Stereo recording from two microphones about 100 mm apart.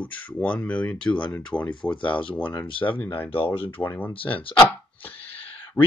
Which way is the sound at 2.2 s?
60° left (ahead or behind).